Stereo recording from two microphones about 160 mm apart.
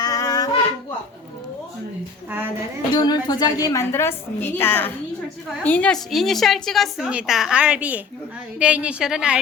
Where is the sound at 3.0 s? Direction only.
25° left (ahead or behind).